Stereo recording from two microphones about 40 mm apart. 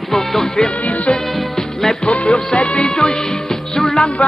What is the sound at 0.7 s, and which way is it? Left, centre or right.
Music, left.